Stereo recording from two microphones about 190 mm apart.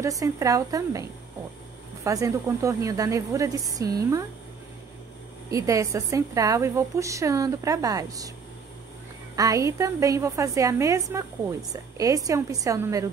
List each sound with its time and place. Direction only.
0.0 s a woman's voice: 15° right (ahead or behind)
2.0 s a woman's voice: 15° right (ahead or behind)
5.5 s a woman's voice: 15° right (ahead or behind)
9.3 s a woman's voice: 20° right (ahead or behind)